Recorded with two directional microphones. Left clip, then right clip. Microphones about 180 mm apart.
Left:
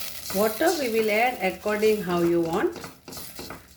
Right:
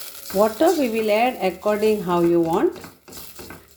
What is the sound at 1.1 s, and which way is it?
A woman's voice, 35° right (ahead or behind).